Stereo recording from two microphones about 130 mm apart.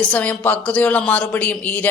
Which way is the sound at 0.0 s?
10° left (ahead or behind).